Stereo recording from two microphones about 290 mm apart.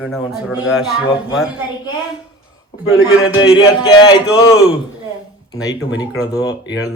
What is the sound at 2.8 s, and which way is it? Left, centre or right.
Speech, left.